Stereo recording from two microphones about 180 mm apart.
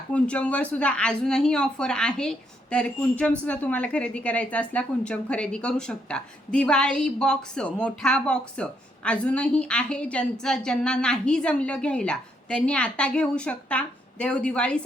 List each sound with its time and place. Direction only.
0.1 s a woman's voice: 5° left (ahead or behind)